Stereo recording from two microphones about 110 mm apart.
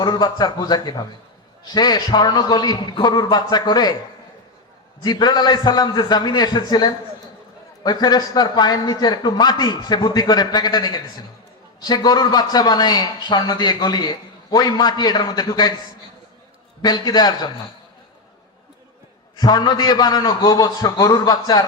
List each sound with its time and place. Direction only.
0.0 s a man's voice: 40° left (ahead or behind)
5.0 s a man's voice: 40° left (ahead or behind)
16.8 s a man's voice: 40° left (ahead or behind)
19.4 s a man's voice: 40° left (ahead or behind)